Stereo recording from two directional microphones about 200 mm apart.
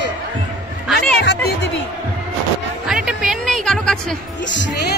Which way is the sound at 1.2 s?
65° left (ahead or behind).